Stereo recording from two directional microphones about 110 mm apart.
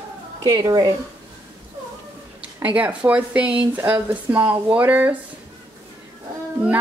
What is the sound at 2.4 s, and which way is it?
Speech, 10° right (ahead or behind).